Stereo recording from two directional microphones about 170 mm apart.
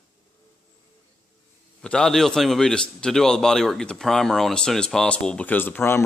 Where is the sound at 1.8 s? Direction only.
5° left (ahead or behind).